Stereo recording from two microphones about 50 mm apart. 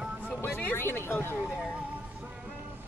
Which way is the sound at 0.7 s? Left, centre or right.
Left.